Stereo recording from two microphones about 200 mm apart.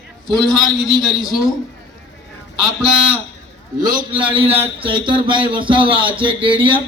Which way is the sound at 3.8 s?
20° right (ahead or behind).